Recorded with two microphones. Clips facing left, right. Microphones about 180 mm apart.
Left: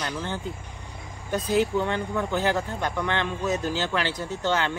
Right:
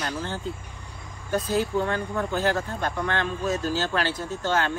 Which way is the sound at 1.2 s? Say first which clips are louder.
Left 1 dB; 20° left (ahead or behind).